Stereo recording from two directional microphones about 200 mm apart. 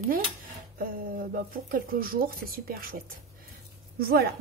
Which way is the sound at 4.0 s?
50° right (ahead or behind).